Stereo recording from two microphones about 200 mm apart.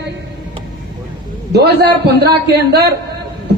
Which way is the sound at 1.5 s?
55° right (ahead or behind).